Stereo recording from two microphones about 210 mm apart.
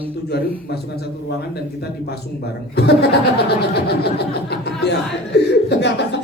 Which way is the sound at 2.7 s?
50° left (ahead or behind).